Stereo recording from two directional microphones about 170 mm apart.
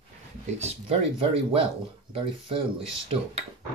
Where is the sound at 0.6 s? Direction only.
35° right (ahead or behind).